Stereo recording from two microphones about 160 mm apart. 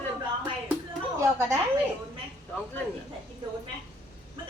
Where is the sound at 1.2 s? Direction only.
20° right (ahead or behind).